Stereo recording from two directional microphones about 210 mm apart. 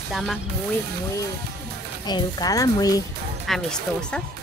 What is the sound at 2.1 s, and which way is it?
Speech, 20° left (ahead or behind).